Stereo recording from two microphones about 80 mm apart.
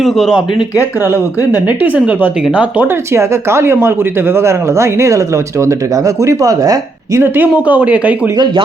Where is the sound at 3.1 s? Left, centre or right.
Right.